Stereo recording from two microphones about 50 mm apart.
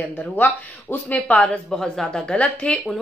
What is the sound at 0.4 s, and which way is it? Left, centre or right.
Speech, left.